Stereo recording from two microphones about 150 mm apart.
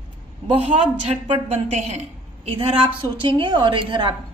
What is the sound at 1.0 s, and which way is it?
Speech, 40° right (ahead or behind).